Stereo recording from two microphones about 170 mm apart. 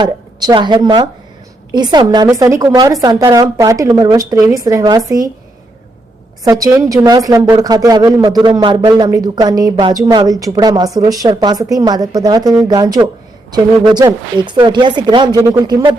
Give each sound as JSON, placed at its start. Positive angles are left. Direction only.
{"t": 0.0, "sound": "a woman's voice", "side_deg": -25}
{"t": 6.4, "sound": "a woman's voice", "side_deg": -20}